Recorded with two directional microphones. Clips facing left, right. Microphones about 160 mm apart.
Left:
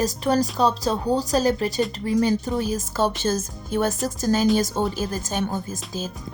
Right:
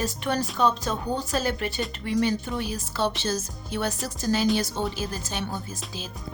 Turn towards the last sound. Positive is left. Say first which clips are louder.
# left 6 dB
turn(degrees=45)  # may be behind; listen again after turning